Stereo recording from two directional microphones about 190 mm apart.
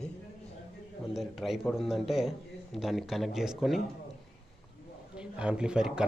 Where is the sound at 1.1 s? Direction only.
Centre (ahead or behind).